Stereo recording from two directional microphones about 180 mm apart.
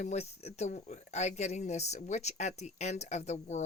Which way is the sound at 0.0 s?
40° left (ahead or behind).